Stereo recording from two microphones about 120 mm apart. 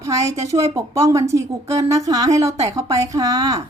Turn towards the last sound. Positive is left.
turn(degrees=-30)  # may be behind; listen again after turning